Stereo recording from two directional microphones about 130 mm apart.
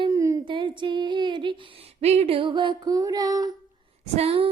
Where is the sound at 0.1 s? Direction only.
25° right (ahead or behind).